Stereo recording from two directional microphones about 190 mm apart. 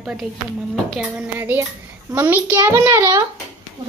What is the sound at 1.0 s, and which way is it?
Hands, 5° right (ahead or behind).